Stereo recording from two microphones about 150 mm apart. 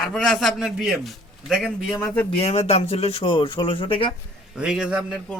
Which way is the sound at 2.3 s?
40° left (ahead or behind).